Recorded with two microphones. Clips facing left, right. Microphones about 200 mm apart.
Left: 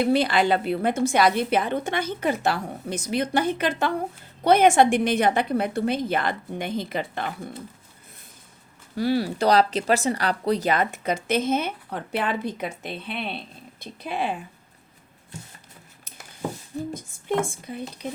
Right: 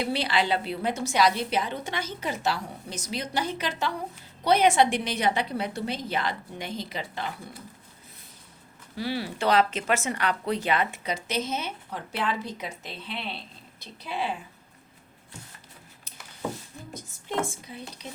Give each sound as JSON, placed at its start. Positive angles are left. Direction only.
{"t": 0.0, "sound": "a woman's voice", "side_deg": 50}
{"t": 9.0, "sound": "speech", "side_deg": 45}
{"t": 16.9, "sound": "speech", "side_deg": 55}